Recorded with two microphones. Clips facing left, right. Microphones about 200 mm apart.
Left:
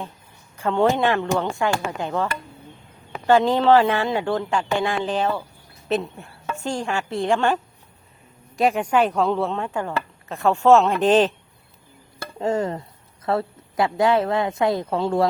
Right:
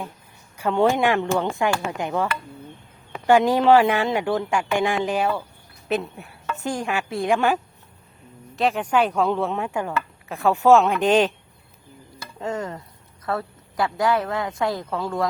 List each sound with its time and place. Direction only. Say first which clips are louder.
0.5 s speech: even; 15° right (ahead or behind)
3.2 s speech: even; 10° right (ahead or behind)
6.6 s speech: even; 15° right (ahead or behind)
8.5 s speech: left 2 dB; centre (ahead or behind)
9.5 s speech: even; 10° right (ahead or behind)
12.4 s a sound: left 6 dB; 30° left (ahead or behind)
13.2 s speech: left 4 dB; 25° left (ahead or behind)